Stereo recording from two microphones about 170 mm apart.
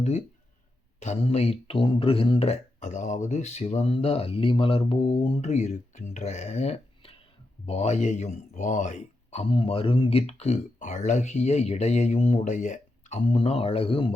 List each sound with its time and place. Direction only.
0.9 s speech: 40° left (ahead or behind)